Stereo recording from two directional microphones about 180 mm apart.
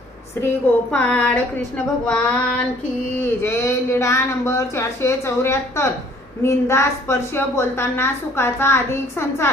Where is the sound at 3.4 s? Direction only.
15° left (ahead or behind).